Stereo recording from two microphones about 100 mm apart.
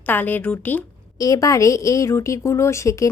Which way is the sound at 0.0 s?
20° left (ahead or behind).